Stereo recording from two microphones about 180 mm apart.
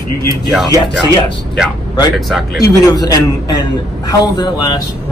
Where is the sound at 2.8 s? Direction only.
20° left (ahead or behind).